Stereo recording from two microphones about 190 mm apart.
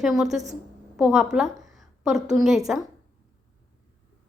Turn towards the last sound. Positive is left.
turn(degrees=0)  # may be behind; listen again after turning